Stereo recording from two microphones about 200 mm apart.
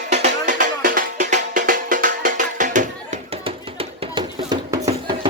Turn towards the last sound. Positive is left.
turn(degrees=-20)  # may be behind; listen again after turning